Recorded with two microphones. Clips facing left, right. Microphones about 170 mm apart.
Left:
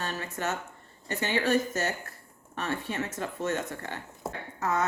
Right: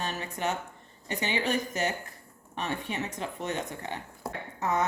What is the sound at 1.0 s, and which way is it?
Speech, 15° right (ahead or behind).